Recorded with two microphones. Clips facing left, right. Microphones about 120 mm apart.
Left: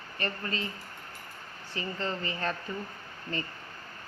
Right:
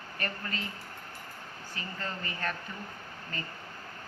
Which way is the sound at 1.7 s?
25° left (ahead or behind).